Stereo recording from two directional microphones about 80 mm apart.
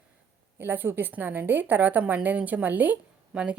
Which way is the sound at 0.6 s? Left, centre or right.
Right.